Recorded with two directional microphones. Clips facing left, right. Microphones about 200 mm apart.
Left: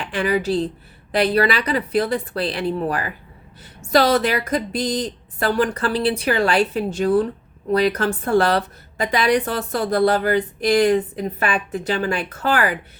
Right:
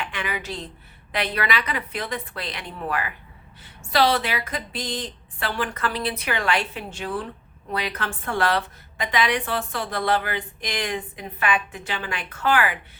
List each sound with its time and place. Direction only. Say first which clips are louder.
0.0 s speech: left 10 dB; 35° left (ahead or behind)